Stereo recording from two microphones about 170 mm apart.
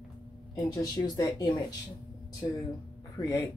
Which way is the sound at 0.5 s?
20° left (ahead or behind).